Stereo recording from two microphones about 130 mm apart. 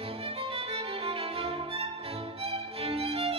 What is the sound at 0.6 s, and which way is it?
Violin, 45° right (ahead or behind).